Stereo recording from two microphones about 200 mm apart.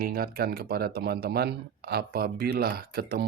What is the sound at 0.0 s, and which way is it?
Speech, 50° right (ahead or behind).